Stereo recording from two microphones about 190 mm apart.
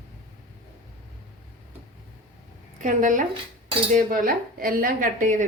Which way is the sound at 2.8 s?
40° right (ahead or behind).